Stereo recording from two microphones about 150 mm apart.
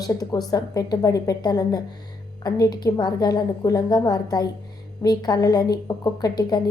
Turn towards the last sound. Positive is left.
turn(degrees=25)  # may be behind; listen again after turning